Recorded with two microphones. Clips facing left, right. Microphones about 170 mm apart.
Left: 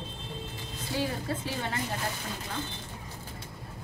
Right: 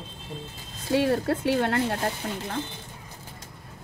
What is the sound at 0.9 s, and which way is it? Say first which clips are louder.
Speech: right 9 dB; 70° right (ahead or behind).